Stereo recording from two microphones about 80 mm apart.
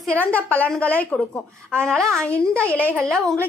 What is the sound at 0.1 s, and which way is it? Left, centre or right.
A woman's voice, centre.